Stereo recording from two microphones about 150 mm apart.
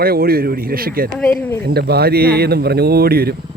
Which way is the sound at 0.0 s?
90° right.